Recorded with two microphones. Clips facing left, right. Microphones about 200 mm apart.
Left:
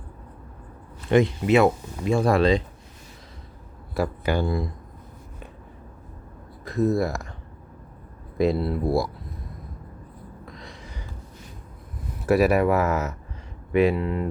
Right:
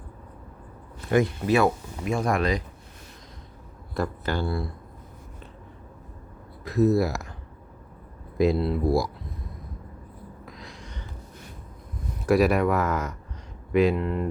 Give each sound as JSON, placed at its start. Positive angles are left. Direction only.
{"t": 1.1, "sound": "speech", "side_deg": 25}
{"t": 3.9, "sound": "speech", "side_deg": 10}
{"t": 6.7, "sound": "speech", "side_deg": 0}
{"t": 8.4, "sound": "speech", "side_deg": 0}
{"t": 10.4, "sound": "a sound", "side_deg": 0}
{"t": 12.2, "sound": "speech", "side_deg": 0}